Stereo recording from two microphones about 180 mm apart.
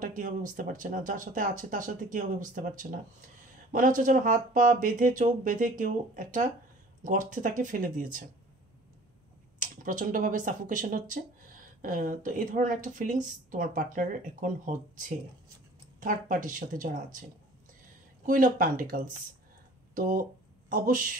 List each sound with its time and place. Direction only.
0.0 s speech: 45° right (ahead or behind)
9.6 s speech: 45° right (ahead or behind)
18.2 s speech: 50° right (ahead or behind)